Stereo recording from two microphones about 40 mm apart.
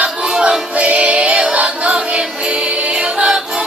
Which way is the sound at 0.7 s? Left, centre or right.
Right.